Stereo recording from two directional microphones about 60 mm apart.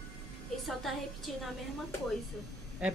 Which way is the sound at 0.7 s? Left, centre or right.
Centre.